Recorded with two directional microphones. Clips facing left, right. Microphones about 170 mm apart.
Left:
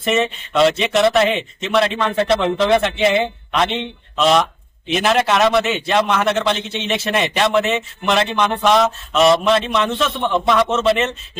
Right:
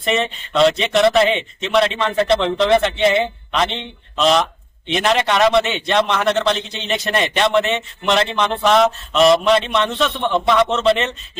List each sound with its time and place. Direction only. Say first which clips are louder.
0.0 s a man's voice: left 2 dB; centre (ahead or behind)